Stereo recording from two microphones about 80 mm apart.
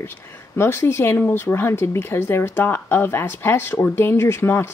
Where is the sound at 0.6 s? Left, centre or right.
Left.